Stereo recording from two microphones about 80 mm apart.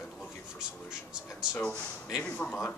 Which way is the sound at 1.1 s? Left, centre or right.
Centre.